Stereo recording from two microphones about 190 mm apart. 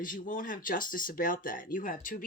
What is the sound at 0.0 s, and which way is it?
Speech, 45° left (ahead or behind).